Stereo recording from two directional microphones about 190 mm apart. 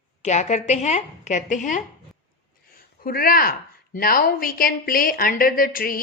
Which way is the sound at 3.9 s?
45° left (ahead or behind).